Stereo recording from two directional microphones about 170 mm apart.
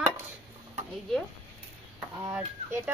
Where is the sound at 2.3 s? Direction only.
15° right (ahead or behind).